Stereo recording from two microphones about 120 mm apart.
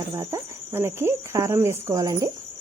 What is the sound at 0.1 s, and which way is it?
Cricket, 30° right (ahead or behind).